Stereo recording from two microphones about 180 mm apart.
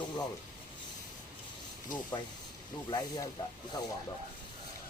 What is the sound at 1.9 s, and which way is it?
Speech, 25° left (ahead or behind).